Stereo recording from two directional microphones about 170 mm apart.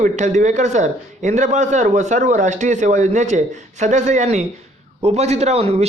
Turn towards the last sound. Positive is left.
turn(degrees=-40)  # may be behind; listen again after turning